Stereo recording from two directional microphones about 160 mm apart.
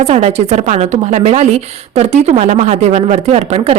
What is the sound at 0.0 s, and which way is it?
A woman's voice, 40° right (ahead or behind).